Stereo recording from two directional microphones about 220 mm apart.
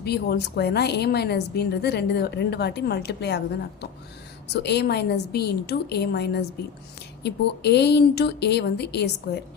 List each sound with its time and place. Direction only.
0.0 s a woman's voice: 50° left (ahead or behind)